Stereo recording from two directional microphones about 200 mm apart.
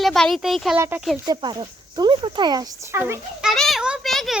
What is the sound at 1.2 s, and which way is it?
Speech, 20° right (ahead or behind).